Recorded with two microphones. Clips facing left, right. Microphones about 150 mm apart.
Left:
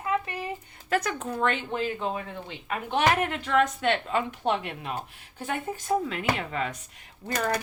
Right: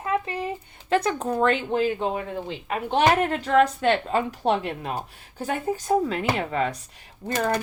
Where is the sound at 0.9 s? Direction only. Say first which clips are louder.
Right 5 dB; 30° right (ahead or behind).